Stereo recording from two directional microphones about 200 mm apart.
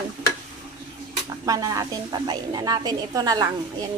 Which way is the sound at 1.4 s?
15° right (ahead or behind).